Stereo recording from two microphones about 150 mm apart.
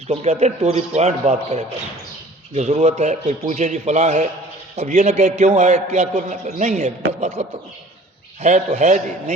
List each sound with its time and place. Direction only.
0.1 s a man's voice: 45° right (ahead or behind)